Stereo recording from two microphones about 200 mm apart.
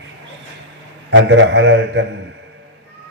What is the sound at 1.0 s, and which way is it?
Speech, 60° right (ahead or behind).